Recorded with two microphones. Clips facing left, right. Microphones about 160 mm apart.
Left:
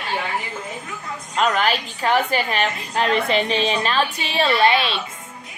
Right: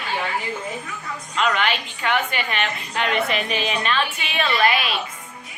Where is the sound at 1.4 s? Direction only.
40° left (ahead or behind).